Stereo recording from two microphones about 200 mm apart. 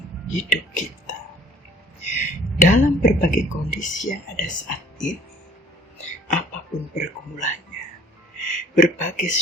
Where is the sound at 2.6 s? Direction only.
40° left (ahead or behind).